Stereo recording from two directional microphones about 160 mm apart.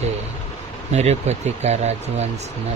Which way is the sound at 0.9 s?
45° right (ahead or behind).